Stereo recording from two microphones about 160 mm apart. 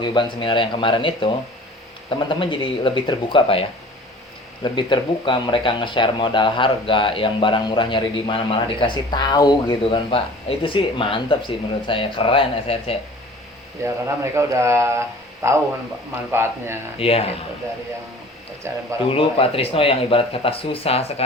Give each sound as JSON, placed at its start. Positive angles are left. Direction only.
{"t": 0.0, "sound": "speech", "side_deg": 30}
{"t": 4.6, "sound": "speech", "side_deg": 30}
{"t": 13.8, "sound": "speech", "side_deg": -20}
{"t": 17.0, "sound": "speech", "side_deg": 40}
{"t": 18.6, "sound": "speech", "side_deg": -15}
{"t": 19.1, "sound": "speech", "side_deg": 35}